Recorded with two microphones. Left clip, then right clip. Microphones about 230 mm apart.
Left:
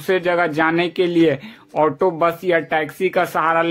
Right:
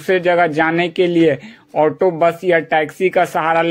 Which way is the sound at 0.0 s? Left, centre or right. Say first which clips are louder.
Right 4 dB; centre.